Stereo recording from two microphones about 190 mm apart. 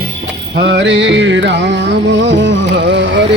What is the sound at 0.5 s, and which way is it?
Music, 65° right (ahead or behind).